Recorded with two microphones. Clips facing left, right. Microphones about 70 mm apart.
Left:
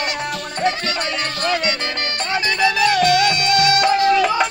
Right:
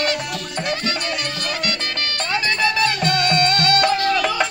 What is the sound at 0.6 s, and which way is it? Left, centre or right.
Music, left.